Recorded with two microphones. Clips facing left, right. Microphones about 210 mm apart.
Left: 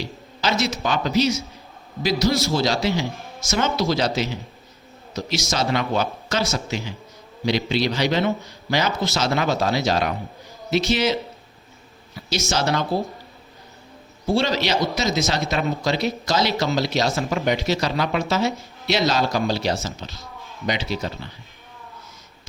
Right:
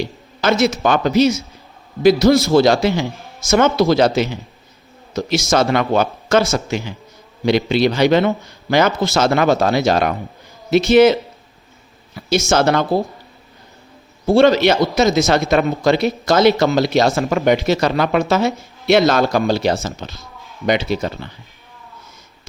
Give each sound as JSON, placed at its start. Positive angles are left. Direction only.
{"t": 0.0, "sound": "a man's voice", "side_deg": -55}
{"t": 14.3, "sound": "a man's voice", "side_deg": -55}